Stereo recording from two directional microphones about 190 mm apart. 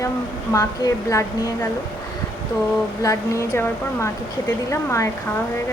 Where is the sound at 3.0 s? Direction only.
15° left (ahead or behind).